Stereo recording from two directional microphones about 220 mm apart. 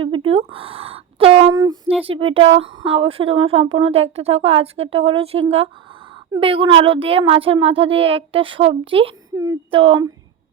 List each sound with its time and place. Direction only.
0.3 s speech: 25° right (ahead or behind)